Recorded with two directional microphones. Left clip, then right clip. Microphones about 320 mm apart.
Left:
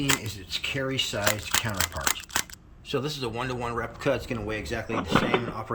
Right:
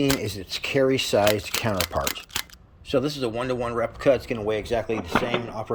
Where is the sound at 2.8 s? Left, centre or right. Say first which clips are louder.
Right 5 dB; centre.